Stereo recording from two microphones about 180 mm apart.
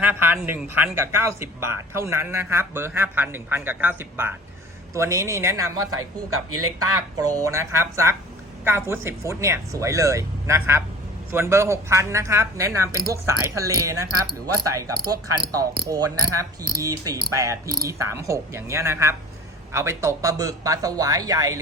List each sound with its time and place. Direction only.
0.0 s speech: 10° right (ahead or behind)